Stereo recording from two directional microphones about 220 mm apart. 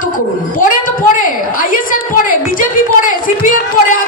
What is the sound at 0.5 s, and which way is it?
A woman's voice, 40° left (ahead or behind).